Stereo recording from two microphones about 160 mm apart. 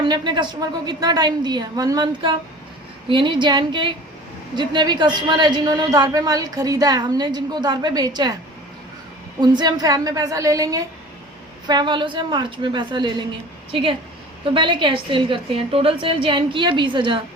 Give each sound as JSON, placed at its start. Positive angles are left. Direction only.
{"t": 0.0, "sound": "a woman's voice", "side_deg": -30}
{"t": 9.4, "sound": "a woman's voice", "side_deg": -25}
{"t": 14.4, "sound": "a woman's voice", "side_deg": -30}